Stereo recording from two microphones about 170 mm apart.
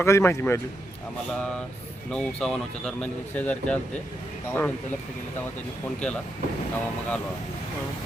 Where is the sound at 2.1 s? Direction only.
5° left (ahead or behind).